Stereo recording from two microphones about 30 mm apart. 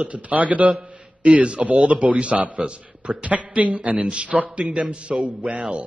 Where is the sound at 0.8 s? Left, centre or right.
Right.